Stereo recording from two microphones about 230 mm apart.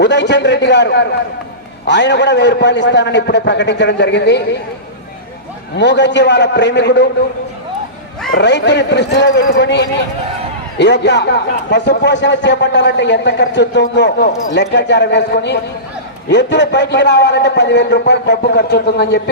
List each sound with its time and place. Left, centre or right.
0.0 s a man's voice: left
5.7 s a man's voice: left
8.4 s a man's voice: left